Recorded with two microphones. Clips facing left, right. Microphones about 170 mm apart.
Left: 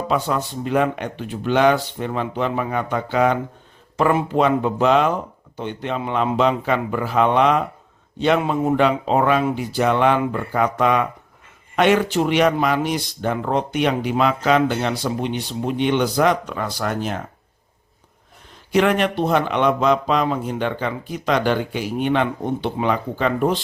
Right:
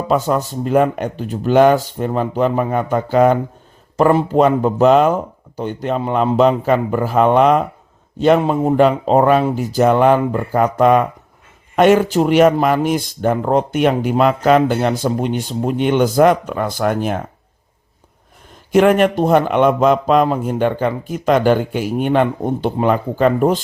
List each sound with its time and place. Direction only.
0.1 s speech: 45° right (ahead or behind)
18.7 s speech: 50° right (ahead or behind)